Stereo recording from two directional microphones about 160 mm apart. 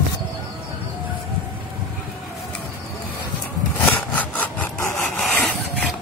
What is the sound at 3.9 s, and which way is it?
Wood, 10° left (ahead or behind).